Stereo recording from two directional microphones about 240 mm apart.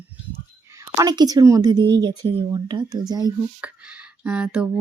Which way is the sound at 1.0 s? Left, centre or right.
Centre.